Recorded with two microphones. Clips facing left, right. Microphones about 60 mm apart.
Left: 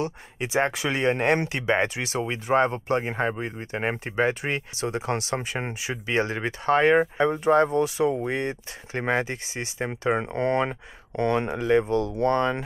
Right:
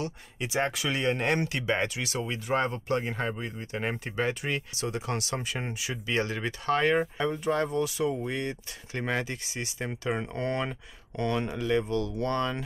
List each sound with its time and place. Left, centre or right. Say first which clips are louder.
0.0 s speech: left 5 dB; left